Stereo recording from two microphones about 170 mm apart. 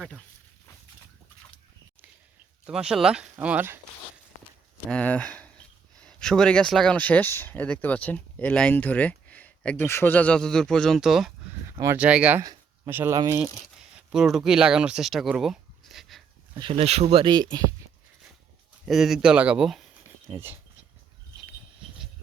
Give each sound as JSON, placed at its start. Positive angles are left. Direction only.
{"t": 2.6, "sound": "speech", "side_deg": -5}
{"t": 4.9, "sound": "speech", "side_deg": 5}
{"t": 11.8, "sound": "speech", "side_deg": -10}
{"t": 12.4, "sound": "speech", "side_deg": -20}
{"t": 14.1, "sound": "speech", "side_deg": -5}
{"t": 16.6, "sound": "speech", "side_deg": -30}
{"t": 18.9, "sound": "speech", "side_deg": 0}